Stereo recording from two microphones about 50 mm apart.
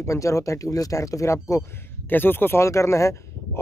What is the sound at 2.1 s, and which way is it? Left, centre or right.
Speech, left.